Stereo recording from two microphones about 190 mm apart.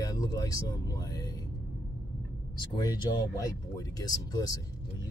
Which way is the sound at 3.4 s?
20° left (ahead or behind).